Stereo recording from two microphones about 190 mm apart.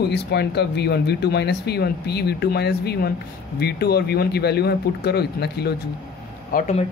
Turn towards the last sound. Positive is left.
turn(degrees=35)  # may be behind; listen again after turning